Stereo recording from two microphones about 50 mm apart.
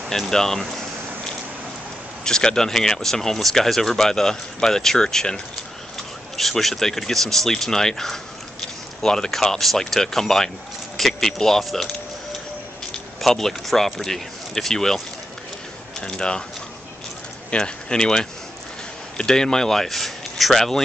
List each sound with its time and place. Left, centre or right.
0.3 s speech: centre
2.2 s speech: centre
13.2 s speech: centre
16.0 s speech: centre
17.5 s speech: centre